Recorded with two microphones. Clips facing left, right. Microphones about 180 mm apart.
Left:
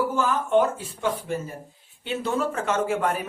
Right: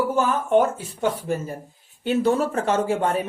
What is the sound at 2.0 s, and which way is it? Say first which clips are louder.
Speech: right 6 dB; 40° right (ahead or behind).